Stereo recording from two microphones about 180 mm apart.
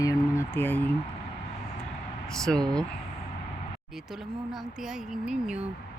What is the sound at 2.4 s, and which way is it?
Speech, 5° left (ahead or behind).